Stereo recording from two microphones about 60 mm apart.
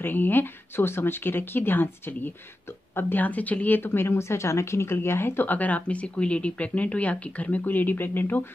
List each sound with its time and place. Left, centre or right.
0.0 s a woman's voice: left